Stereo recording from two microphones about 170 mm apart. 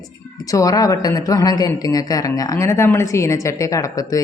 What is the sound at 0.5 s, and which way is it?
A woman's voice, 20° left (ahead or behind).